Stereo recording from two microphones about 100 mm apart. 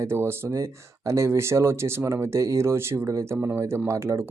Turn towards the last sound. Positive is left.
turn(degrees=-30)  # may be behind; listen again after turning